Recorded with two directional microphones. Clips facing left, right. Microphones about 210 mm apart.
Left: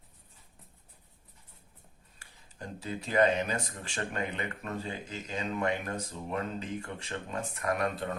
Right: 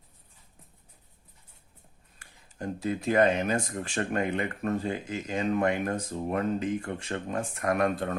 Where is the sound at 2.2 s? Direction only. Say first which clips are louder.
Right 7 dB; 50° right (ahead or behind).